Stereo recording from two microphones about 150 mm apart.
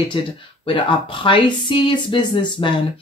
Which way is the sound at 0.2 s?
35° left (ahead or behind).